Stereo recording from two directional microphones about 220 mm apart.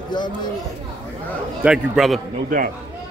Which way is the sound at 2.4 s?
40° right (ahead or behind).